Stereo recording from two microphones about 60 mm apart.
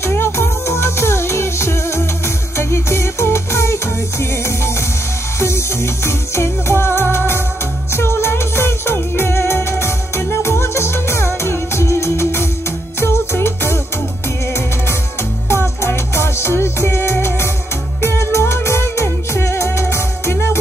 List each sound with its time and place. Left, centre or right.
0.1 s music: left
15.4 s music: left